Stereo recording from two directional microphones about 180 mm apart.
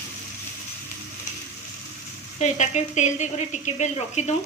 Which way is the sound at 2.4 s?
40° left (ahead or behind).